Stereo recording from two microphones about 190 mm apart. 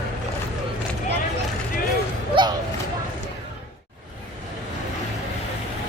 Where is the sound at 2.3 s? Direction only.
25° right (ahead or behind).